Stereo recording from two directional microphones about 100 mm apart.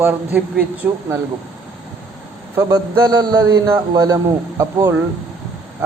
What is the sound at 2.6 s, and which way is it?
Speech, 40° right (ahead or behind).